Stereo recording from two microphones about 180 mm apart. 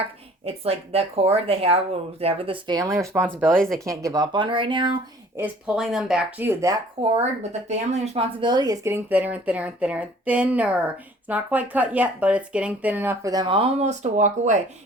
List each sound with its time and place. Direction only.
0.4 s speech: 35° right (ahead or behind); by 3.2 s 15° right (ahead or behind)
3.5 s speech: 5° left (ahead or behind)
3.8 s speech: 20° right (ahead or behind)
5.4 s speech: 5° right (ahead or behind)
7.0 s speech: 30° right (ahead or behind)